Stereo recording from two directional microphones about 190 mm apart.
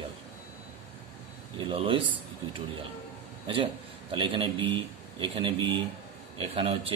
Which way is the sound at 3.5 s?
25° right (ahead or behind).